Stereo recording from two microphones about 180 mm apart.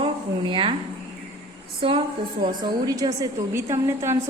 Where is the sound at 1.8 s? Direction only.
30° right (ahead or behind).